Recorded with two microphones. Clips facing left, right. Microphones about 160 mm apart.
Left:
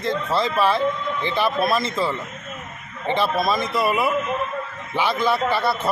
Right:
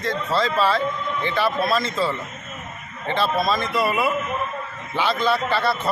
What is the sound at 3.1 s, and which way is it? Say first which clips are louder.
Speech: left 1 dB; 15° left (ahead or behind).